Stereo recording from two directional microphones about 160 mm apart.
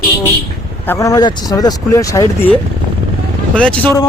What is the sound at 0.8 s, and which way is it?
Speech, 15° left (ahead or behind).